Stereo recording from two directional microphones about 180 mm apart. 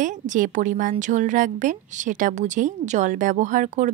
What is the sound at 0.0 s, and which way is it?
Speech, 45° right (ahead or behind).